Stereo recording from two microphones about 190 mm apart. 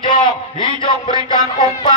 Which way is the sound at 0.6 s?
25° left (ahead or behind).